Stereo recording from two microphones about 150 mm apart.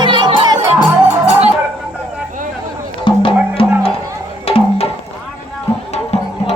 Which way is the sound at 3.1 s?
35° left (ahead or behind).